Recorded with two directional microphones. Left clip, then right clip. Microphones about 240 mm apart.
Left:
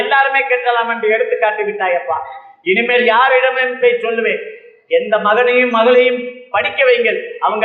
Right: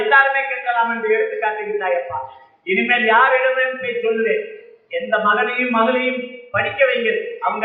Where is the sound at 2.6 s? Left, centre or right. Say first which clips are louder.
Left 4 dB; left.